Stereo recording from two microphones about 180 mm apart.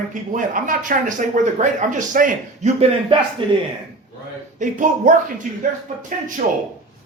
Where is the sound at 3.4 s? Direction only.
30° right (ahead or behind).